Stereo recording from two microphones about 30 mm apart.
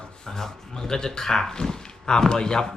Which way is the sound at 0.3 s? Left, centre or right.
Centre.